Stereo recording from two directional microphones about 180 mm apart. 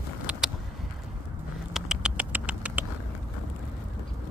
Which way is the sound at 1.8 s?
5° right (ahead or behind).